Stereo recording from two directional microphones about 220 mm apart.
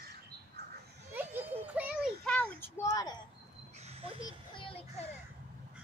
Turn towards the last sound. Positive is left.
turn(degrees=20)  # may be behind; listen again after turning